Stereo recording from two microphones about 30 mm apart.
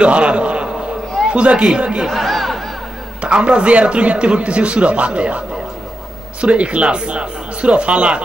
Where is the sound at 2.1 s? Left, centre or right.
Centre.